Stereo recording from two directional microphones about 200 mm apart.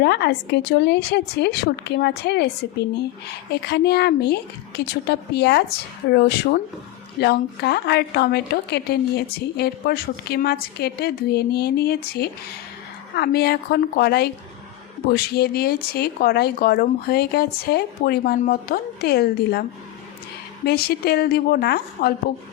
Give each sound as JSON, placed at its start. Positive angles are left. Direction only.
{"t": 0.0, "sound": "a woman's voice", "side_deg": 55}
{"t": 20.7, "sound": "a woman's voice", "side_deg": 50}